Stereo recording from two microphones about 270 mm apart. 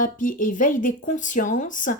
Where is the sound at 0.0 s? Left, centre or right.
Left.